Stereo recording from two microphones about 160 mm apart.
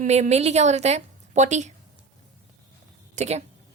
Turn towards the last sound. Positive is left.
turn(degrees=-45)  # may be behind; listen again after turning